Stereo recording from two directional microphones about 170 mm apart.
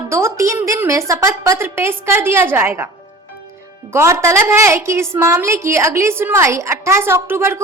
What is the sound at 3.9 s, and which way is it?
A woman's voice, 15° right (ahead or behind).